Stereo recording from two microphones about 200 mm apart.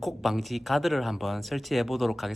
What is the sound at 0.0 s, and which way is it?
Speech, centre (ahead or behind).